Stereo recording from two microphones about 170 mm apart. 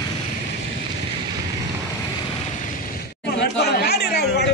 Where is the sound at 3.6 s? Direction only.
75° left (ahead or behind).